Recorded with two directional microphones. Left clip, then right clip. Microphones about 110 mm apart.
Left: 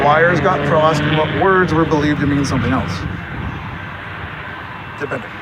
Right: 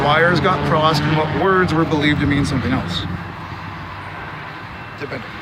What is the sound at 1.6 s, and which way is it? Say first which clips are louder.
Speech: left 2 dB; 15° right (ahead or behind).